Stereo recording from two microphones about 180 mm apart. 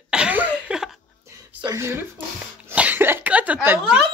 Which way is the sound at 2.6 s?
10° right (ahead or behind).